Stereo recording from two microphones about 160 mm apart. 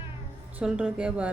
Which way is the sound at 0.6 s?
5° right (ahead or behind).